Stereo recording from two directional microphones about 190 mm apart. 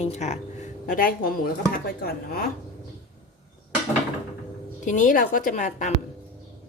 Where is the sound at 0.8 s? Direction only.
50° left (ahead or behind).